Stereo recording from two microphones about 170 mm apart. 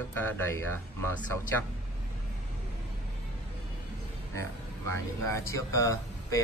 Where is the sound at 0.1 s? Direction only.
10° left (ahead or behind).